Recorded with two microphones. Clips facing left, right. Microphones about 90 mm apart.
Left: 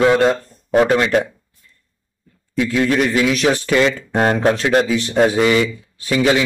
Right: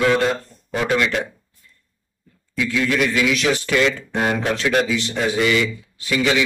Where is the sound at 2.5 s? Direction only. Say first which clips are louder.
Left 4 dB; 40° left (ahead or behind).